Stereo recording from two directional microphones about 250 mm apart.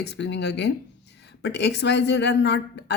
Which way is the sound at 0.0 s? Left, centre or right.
Left.